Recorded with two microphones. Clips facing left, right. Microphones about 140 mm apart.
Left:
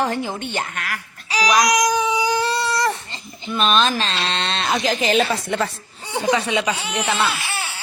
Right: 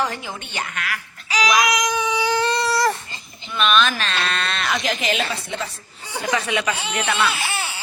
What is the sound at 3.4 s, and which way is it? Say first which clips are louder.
Speech: left 1 dB; 35° left (ahead or behind).